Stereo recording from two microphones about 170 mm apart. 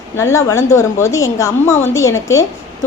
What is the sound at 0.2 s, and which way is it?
A woman's voice, 15° left (ahead or behind).